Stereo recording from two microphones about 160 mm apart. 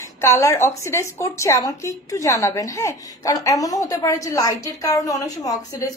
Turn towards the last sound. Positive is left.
turn(degrees=20)  # may be behind; listen again after turning